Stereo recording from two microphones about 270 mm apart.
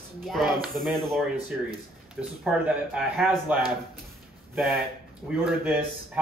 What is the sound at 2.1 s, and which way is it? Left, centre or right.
Speech, centre.